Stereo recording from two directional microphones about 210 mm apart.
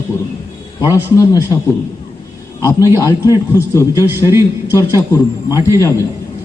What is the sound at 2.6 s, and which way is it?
A man's voice, 15° left (ahead or behind).